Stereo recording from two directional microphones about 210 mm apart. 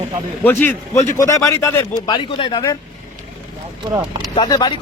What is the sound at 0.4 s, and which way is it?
Speech, 10° left (ahead or behind).